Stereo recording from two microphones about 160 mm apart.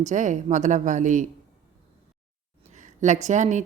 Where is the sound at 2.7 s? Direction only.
50° right (ahead or behind).